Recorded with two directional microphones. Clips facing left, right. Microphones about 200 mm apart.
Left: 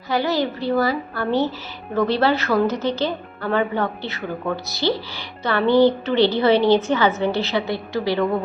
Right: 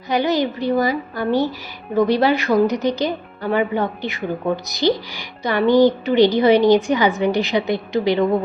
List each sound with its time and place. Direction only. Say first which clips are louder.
0.1 s speech: right 2 dB; 15° right (ahead or behind)